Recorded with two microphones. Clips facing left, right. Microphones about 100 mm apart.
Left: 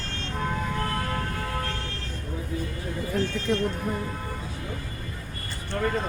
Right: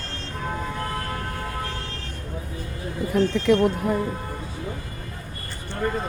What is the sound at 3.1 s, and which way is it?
Speech, 75° right (ahead or behind).